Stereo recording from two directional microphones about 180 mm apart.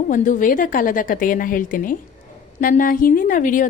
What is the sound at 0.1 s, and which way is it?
A woman's voice, 45° left (ahead or behind).